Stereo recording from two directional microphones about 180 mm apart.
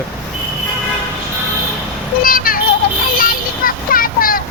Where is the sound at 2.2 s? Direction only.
50° left (ahead or behind).